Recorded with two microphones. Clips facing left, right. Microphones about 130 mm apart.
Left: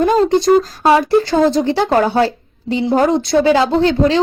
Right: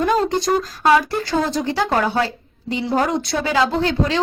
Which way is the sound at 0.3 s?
30° left (ahead or behind).